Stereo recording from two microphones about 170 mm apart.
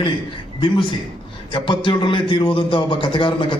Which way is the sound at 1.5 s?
30° left (ahead or behind).